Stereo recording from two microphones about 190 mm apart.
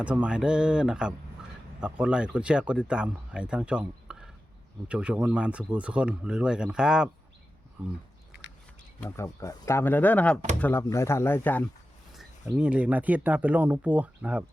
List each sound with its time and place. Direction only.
0.0 s speech: 5° right (ahead or behind)
8.3 s a sound: 65° left (ahead or behind)
9.0 s speech: 15° left (ahead or behind)
12.1 s speech: 5° right (ahead or behind)